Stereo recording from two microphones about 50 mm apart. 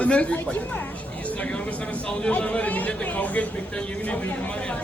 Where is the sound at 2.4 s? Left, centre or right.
Left.